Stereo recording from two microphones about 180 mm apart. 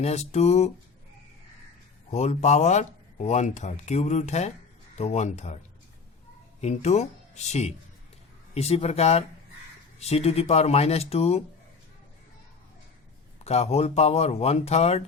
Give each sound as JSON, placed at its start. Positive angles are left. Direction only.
{"t": 0.0, "sound": "speech", "side_deg": 35}
{"t": 2.0, "sound": "speech", "side_deg": 40}
{"t": 6.6, "sound": "speech", "side_deg": 40}
{"t": 13.4, "sound": "speech", "side_deg": 35}